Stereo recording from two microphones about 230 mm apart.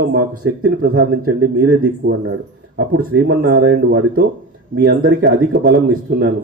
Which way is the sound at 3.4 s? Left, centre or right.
Right.